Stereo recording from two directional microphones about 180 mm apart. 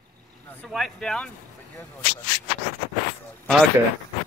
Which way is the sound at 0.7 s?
Centre (ahead or behind).